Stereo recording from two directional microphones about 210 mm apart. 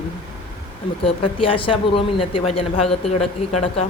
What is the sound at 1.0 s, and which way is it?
Speech, 25° left (ahead or behind).